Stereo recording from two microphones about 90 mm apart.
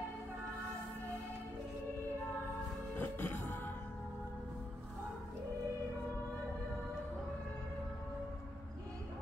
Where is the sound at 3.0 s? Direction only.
25° left (ahead or behind).